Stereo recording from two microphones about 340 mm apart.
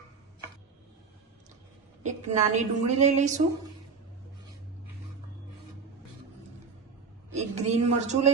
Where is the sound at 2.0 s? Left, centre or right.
Right.